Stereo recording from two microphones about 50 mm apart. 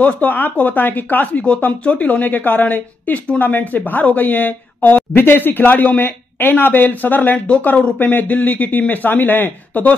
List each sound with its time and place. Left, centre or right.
0.0 s speech: left
7.3 s speech: left